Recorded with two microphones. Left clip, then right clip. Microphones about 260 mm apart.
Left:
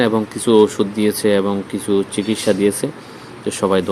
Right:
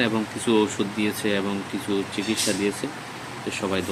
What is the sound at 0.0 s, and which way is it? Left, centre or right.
Speech, centre.